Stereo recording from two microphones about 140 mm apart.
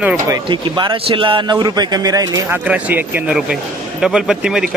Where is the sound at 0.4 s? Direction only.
35° right (ahead or behind).